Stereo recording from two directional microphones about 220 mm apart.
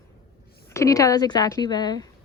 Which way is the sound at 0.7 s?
15° left (ahead or behind).